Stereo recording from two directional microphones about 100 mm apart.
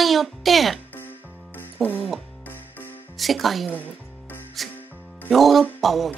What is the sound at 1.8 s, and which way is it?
Speech, centre (ahead or behind).